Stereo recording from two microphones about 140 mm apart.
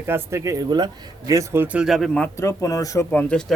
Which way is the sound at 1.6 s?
5° right (ahead or behind).